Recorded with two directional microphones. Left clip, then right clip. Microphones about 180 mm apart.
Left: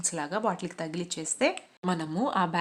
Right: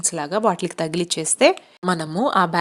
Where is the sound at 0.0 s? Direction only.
35° right (ahead or behind).